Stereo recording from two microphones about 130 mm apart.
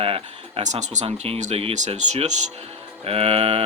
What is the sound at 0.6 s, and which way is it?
Speech, 65° right (ahead or behind).